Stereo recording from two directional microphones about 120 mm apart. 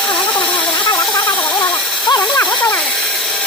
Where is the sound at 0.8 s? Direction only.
40° left (ahead or behind).